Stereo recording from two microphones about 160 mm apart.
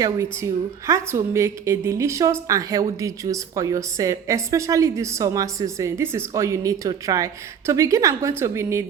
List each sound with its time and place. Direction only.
0.0 s a woman's voice: 20° right (ahead or behind)